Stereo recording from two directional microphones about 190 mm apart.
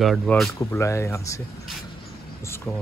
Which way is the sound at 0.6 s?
15° left (ahead or behind).